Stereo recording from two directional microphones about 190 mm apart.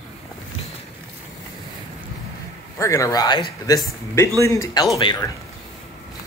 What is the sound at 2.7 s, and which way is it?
Speech, 15° left (ahead or behind).